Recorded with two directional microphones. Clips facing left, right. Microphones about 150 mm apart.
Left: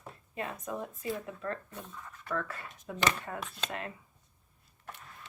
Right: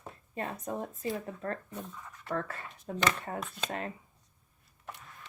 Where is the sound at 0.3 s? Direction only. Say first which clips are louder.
Right 1 dB; 35° right (ahead or behind).